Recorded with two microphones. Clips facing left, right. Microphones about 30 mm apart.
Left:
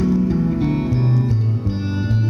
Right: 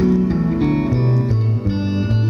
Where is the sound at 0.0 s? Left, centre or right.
Centre.